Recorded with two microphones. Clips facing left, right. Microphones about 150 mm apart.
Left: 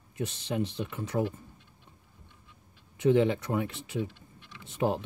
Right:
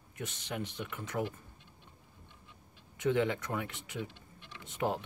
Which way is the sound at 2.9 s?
25° left (ahead or behind).